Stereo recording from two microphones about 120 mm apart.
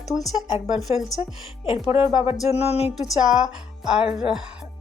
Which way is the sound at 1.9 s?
45° left (ahead or behind).